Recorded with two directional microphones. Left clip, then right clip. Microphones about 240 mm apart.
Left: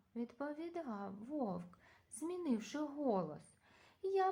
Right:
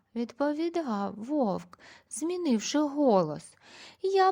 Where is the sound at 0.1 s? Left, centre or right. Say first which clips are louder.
Right 15 dB; right.